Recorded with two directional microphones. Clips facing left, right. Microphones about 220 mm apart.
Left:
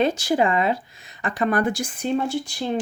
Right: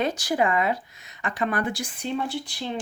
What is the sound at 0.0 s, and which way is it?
Speech, 25° left (ahead or behind).